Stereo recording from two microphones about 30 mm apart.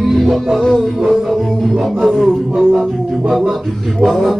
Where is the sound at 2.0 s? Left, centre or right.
Centre.